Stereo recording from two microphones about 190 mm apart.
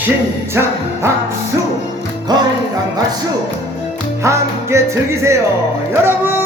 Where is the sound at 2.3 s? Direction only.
20° right (ahead or behind).